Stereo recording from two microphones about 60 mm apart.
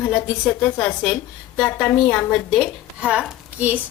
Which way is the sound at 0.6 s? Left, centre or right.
Left.